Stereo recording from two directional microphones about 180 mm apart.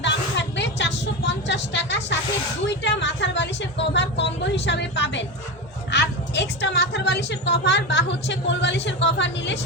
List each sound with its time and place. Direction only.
0.0 s vehicle: 75° left (ahead or behind)
2.6 s a sound: 75° left (ahead or behind)
5.9 s a woman's voice: 75° left (ahead or behind)